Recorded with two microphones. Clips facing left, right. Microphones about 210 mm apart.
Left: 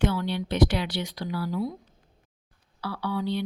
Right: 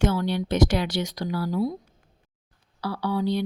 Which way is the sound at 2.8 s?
40° right (ahead or behind).